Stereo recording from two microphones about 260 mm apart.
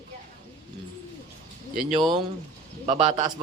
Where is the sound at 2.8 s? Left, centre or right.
Right.